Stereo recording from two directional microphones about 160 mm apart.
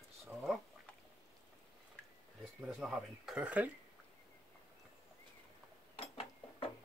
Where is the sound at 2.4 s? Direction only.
5° right (ahead or behind).